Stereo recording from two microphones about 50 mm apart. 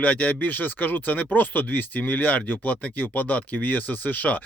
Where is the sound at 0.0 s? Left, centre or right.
Left.